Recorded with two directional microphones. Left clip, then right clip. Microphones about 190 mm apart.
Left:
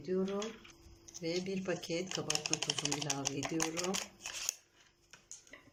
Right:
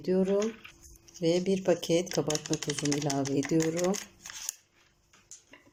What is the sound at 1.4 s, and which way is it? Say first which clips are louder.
Speech: right 11 dB; 35° right (ahead or behind).